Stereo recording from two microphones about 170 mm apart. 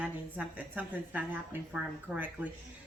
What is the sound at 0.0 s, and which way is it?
Speech, 10° right (ahead or behind).